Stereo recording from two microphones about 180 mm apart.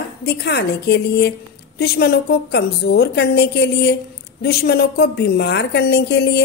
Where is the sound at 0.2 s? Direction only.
65° left (ahead or behind).